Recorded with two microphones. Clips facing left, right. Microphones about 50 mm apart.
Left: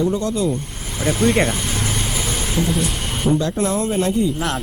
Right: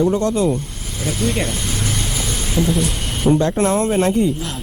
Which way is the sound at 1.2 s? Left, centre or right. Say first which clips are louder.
Left 4 dB; left.